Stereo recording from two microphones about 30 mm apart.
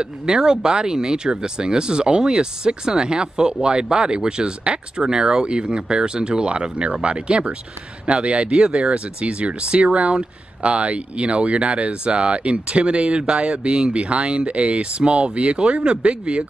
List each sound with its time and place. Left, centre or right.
0.0 s speech: right
8.9 s speech: right
13.1 s speech: right
13.9 s speech: right